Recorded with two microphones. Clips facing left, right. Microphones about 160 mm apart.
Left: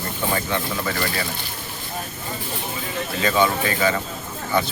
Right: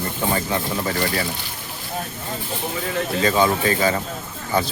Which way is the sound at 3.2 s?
35° right (ahead or behind).